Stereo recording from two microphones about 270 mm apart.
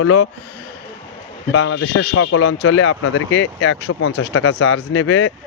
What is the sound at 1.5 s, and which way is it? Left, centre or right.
Speech, left.